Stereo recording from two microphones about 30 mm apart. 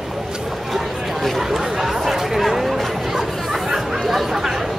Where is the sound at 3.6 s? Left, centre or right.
Centre.